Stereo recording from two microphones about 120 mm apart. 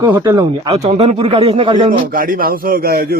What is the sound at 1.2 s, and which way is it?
Speech, 50° right (ahead or behind).